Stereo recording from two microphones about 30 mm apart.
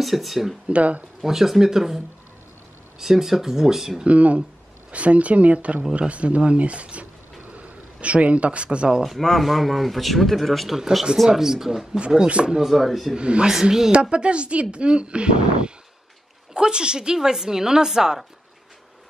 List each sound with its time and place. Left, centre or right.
0.0 s speech: centre
0.7 s speech: right
1.2 s speech: centre
3.0 s speech: centre
4.0 s speech: right
7.5 s a sound: right
8.7 s speech: right
9.4 s speech: centre
10.7 s speech: centre
12.6 s speech: centre
13.1 s speech: right
13.5 s speech: centre
14.1 s a woman's voice: right; by 18.2 s centre